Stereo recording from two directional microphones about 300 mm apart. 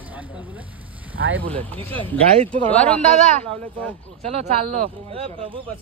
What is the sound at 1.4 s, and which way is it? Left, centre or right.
Speech, centre.